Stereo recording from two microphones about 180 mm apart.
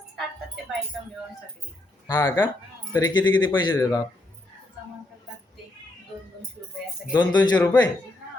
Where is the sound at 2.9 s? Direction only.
25° left (ahead or behind).